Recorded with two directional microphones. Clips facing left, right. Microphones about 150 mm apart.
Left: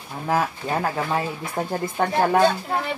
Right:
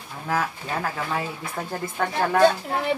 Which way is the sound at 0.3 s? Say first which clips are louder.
Left 4 dB; 25° left (ahead or behind).